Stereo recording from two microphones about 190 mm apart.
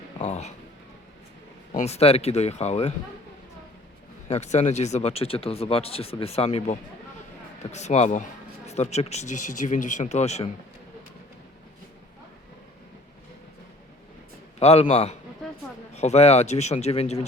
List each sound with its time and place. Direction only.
0.2 s speech: 35° left (ahead or behind)
1.7 s speech: 35° left (ahead or behind)
4.3 s speech: 35° left (ahead or behind)
14.6 s speech: 35° left (ahead or behind)